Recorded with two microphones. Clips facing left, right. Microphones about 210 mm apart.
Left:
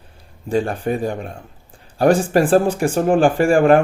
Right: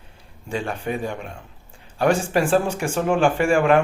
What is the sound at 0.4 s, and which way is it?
Speech, 35° left (ahead or behind).